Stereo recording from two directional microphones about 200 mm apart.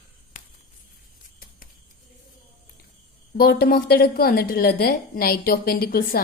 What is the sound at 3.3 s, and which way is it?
A woman's voice, 50° left (ahead or behind).